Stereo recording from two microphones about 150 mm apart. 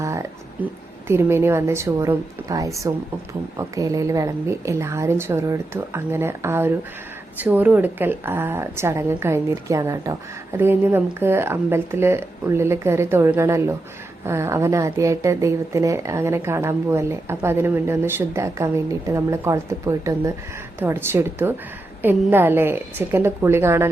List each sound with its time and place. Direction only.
0.0 s a woman's voice: 20° right (ahead or behind)